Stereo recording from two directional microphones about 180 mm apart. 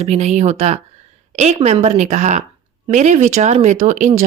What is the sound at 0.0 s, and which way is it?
Speech, 35° right (ahead or behind).